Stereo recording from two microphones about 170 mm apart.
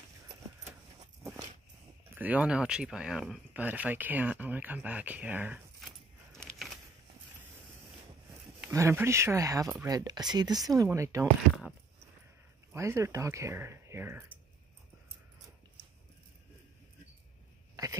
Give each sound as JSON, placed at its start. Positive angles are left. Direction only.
{"t": 2.1, "sound": "speech", "side_deg": -10}
{"t": 8.6, "sound": "speech", "side_deg": -15}
{"t": 12.7, "sound": "speech", "side_deg": -15}